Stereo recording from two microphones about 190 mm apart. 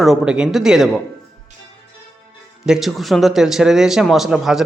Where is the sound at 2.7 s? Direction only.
Centre (ahead or behind).